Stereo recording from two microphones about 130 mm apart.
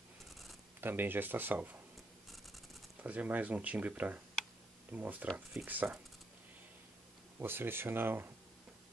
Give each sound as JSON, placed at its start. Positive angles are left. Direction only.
{"t": 0.3, "sound": "zipper", "side_deg": 0}
{"t": 0.7, "sound": "speech", "side_deg": -15}
{"t": 3.0, "sound": "speech", "side_deg": -10}
{"t": 5.3, "sound": "speech", "side_deg": 0}
{"t": 5.7, "sound": "speech", "side_deg": -15}
{"t": 7.3, "sound": "speech", "side_deg": -15}